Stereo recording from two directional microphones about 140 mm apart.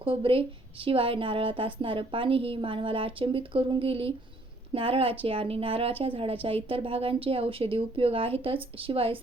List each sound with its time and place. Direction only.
0.0 s a woman's voice: 40° right (ahead or behind)